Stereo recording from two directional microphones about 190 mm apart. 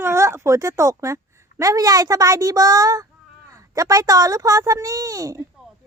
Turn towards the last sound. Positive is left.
turn(degrees=-20)  # may be behind; listen again after turning